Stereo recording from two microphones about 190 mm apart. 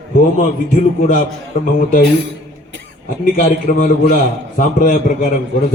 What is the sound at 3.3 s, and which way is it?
A man's voice, 45° left (ahead or behind).